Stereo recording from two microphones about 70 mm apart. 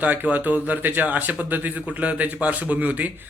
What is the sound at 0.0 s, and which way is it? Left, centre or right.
Speech, right.